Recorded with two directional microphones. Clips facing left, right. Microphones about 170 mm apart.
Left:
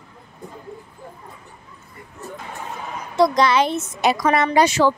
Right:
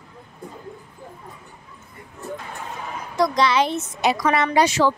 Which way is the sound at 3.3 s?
50° left (ahead or behind).